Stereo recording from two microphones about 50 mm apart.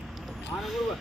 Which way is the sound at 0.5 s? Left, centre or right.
Left.